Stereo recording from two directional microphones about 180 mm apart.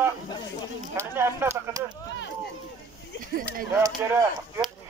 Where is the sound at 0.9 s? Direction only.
15° right (ahead or behind).